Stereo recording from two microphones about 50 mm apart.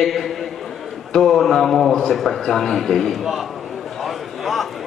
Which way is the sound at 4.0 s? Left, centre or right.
Centre.